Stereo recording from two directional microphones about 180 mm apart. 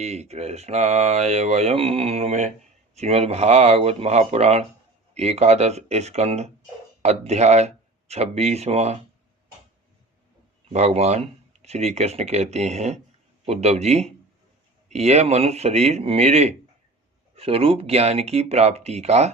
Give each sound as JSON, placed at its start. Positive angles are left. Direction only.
{"t": 0.0, "sound": "speech", "side_deg": -35}
{"t": 10.7, "sound": "speech", "side_deg": -35}